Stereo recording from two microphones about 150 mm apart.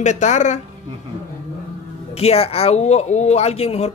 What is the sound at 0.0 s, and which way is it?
Speech, 50° left (ahead or behind).